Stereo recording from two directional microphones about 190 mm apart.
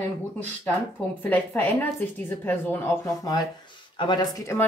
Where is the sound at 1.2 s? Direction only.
10° left (ahead or behind).